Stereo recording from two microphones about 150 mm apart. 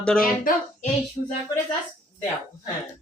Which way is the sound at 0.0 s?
5° left (ahead or behind).